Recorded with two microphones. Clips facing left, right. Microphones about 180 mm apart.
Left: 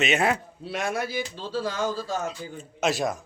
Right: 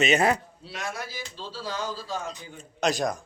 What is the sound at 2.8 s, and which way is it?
Speech, centre (ahead or behind).